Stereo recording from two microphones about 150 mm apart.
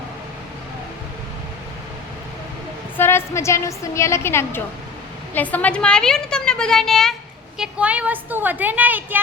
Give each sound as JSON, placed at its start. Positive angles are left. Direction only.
{"t": 3.0, "sound": "a woman's voice", "side_deg": 15}
{"t": 7.6, "sound": "a woman's voice", "side_deg": -10}